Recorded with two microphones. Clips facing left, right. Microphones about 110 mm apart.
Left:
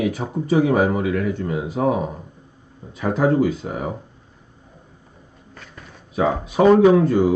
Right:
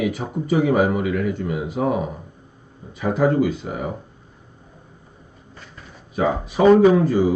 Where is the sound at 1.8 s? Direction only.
45° left (ahead or behind).